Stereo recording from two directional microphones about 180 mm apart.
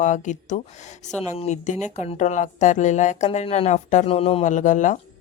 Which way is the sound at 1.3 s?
40° left (ahead or behind).